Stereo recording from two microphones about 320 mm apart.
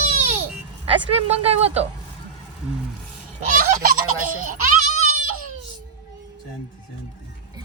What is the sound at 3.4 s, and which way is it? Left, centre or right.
Speech, right.